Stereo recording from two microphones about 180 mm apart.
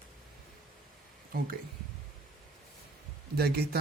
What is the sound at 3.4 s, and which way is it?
Speech, 60° right (ahead or behind).